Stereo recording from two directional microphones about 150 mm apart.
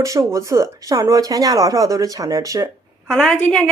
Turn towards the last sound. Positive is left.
turn(degrees=5)  # may be behind; listen again after turning